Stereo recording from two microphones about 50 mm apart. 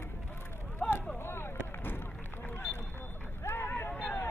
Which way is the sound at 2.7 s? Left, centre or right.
Left.